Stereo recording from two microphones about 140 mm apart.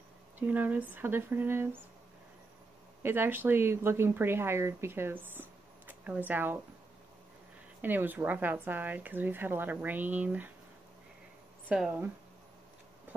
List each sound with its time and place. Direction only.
0.4 s speech: 10° right (ahead or behind)
3.0 s speech: 15° right (ahead or behind)
7.8 s speech: 15° right (ahead or behind)
11.7 s speech: 10° right (ahead or behind)